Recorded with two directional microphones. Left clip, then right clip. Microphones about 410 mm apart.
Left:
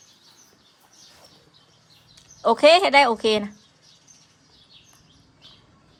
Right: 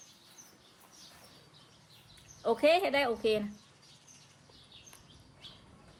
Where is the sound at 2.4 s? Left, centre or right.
Centre.